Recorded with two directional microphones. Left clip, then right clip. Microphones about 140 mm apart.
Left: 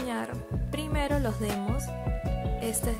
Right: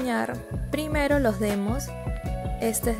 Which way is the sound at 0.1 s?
40° right (ahead or behind).